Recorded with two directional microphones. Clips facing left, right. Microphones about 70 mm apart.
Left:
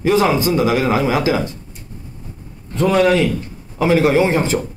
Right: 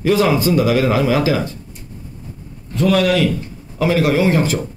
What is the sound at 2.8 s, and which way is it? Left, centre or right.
Speech, left.